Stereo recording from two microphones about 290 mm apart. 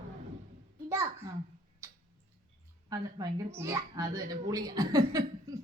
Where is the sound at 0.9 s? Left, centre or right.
Centre.